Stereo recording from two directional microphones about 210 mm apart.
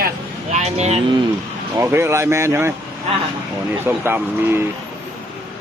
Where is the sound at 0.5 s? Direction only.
30° right (ahead or behind).